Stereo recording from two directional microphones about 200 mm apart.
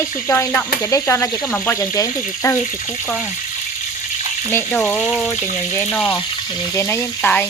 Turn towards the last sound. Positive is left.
turn(degrees=10)  # may be behind; listen again after turning